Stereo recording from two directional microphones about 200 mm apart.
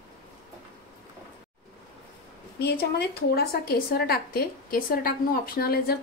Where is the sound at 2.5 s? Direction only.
55° left (ahead or behind).